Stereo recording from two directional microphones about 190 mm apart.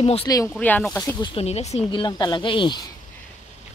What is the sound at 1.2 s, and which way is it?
Speech, 30° left (ahead or behind).